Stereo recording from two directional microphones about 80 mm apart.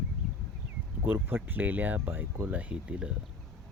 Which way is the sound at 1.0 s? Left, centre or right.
Right.